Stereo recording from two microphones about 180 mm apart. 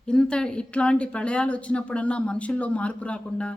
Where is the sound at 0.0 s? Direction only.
5° left (ahead or behind).